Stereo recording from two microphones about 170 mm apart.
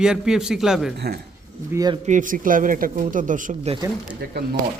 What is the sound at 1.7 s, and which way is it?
Speech, 25° right (ahead or behind).